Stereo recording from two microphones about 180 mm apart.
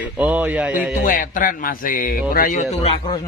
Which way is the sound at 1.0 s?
50° left (ahead or behind).